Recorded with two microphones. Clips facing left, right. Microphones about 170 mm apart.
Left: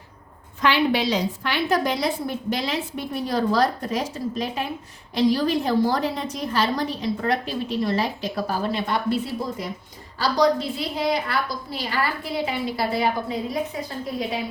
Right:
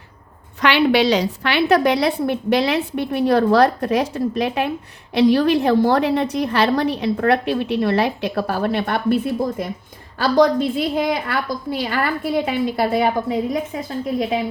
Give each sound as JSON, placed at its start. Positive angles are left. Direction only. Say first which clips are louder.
{"t": 0.6, "sound": "a woman's voice", "louder": "right 5 dB", "side_deg": -75}